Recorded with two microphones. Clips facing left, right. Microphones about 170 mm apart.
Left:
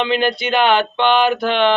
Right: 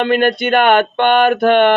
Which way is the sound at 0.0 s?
50° right (ahead or behind).